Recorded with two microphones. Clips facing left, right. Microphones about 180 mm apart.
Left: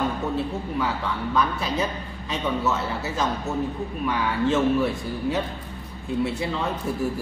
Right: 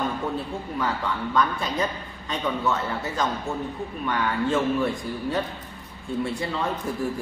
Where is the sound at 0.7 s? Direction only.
5° left (ahead or behind).